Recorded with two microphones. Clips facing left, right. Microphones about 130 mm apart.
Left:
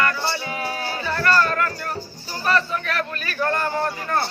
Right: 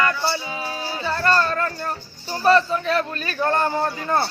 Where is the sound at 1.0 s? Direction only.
30° right (ahead or behind).